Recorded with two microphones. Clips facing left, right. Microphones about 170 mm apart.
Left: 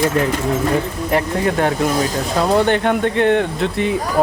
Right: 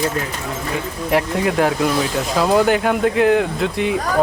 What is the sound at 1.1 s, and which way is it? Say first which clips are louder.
Speech: even; 5° right (ahead or behind).